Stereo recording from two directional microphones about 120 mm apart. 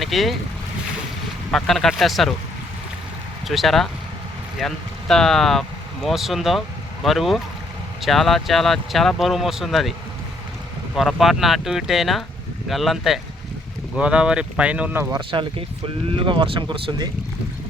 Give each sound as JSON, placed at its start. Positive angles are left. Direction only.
{"t": 0.0, "sound": "speech", "side_deg": 0}
{"t": 1.5, "sound": "speech", "side_deg": 5}
{"t": 3.4, "sound": "speech", "side_deg": 0}
{"t": 10.9, "sound": "speech", "side_deg": 0}
{"t": 15.3, "sound": "speech", "side_deg": -40}